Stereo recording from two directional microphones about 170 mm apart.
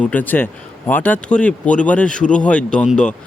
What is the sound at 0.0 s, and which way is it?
Speech, 10° left (ahead or behind).